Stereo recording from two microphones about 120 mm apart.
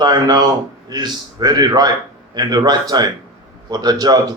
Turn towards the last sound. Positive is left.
turn(degrees=-35)  # may be behind; listen again after turning